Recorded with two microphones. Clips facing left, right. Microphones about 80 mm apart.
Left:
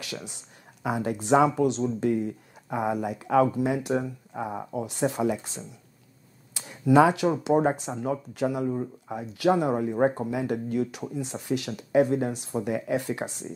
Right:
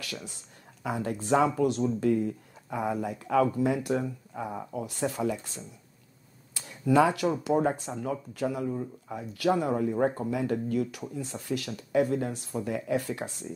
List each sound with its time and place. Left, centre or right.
0.0 s speech: centre
6.5 s a sound: left
7.4 s speech: left